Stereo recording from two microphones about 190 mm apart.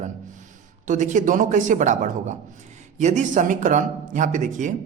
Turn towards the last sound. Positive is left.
turn(degrees=-40)  # may be behind; listen again after turning